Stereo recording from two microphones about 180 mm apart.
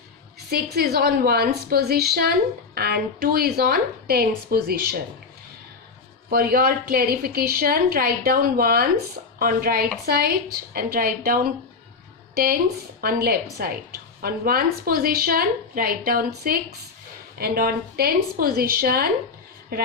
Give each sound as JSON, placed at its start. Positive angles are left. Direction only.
{"t": 0.5, "sound": "a woman's voice", "side_deg": -60}
{"t": 6.3, "sound": "a woman's voice", "side_deg": -55}
{"t": 13.0, "sound": "a woman's voice", "side_deg": -55}